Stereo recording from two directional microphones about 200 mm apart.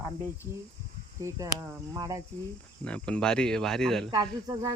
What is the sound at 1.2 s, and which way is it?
Speech, 15° right (ahead or behind).